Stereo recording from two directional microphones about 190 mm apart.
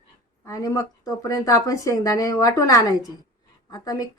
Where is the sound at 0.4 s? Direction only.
15° left (ahead or behind).